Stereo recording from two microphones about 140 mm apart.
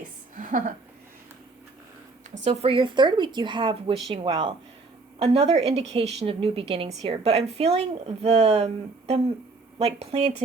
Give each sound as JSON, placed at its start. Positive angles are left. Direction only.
{"t": 0.3, "sound": "a sound", "side_deg": -70}
{"t": 2.4, "sound": "speech", "side_deg": -45}
{"t": 5.2, "sound": "a woman's voice", "side_deg": -45}